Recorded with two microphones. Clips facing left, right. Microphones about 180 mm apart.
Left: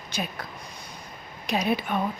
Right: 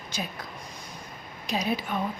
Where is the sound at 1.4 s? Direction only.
65° left (ahead or behind).